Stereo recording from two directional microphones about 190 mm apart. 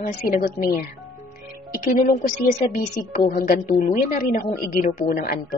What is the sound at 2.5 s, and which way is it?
A woman's voice, 45° left (ahead or behind).